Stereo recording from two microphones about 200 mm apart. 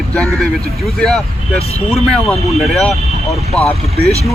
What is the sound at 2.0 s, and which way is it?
Speech, 5° left (ahead or behind).